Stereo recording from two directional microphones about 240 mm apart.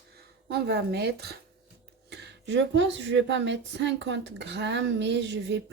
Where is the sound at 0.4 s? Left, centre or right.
Right.